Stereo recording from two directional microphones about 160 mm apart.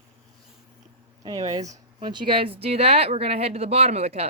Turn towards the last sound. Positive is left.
turn(degrees=-40)  # may be behind; listen again after turning